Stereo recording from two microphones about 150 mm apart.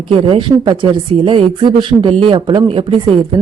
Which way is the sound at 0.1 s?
35° right (ahead or behind).